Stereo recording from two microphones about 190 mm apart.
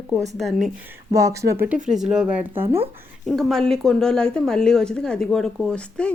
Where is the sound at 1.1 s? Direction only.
15° right (ahead or behind).